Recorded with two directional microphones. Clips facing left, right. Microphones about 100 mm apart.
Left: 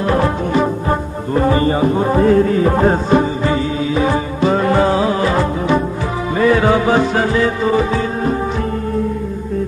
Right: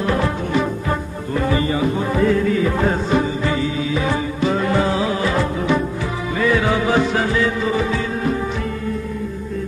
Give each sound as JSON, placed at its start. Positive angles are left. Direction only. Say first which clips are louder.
{"t": 0.0, "sound": "music", "louder": "left 4 dB", "side_deg": 35}